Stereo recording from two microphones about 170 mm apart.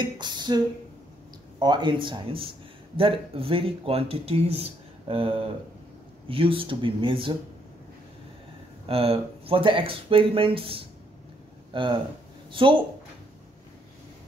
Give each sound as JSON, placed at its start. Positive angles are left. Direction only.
{"t": 0.2, "sound": "beatboxing", "side_deg": -25}
{"t": 1.6, "sound": "speech", "side_deg": -25}
{"t": 8.8, "sound": "speech", "side_deg": -35}